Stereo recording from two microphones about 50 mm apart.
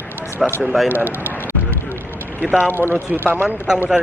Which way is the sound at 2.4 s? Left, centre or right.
Centre.